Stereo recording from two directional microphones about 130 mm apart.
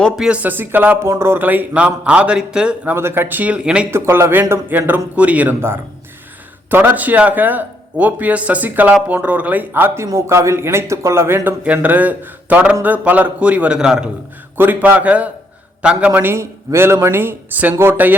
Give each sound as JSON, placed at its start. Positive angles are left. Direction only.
{"t": 0.2, "sound": "a man's voice", "side_deg": -10}
{"t": 2.9, "sound": "a man's voice", "side_deg": -20}
{"t": 3.9, "sound": "a man's voice", "side_deg": -20}